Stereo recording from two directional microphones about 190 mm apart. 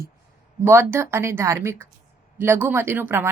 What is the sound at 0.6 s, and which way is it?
Speech, 10° right (ahead or behind).